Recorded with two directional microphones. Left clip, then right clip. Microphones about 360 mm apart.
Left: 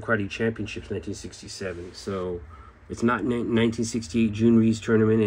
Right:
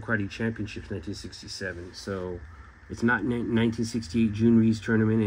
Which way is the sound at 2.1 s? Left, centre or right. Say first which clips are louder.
Left 3 dB; left.